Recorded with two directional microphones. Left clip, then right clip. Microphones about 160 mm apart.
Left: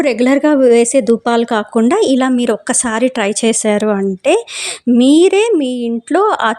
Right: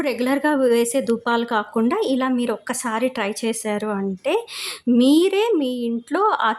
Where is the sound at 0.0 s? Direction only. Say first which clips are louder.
Left 9 dB; 40° left (ahead or behind).